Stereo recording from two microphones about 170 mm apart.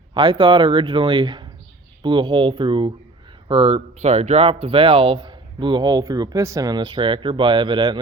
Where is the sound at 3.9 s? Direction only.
40° right (ahead or behind).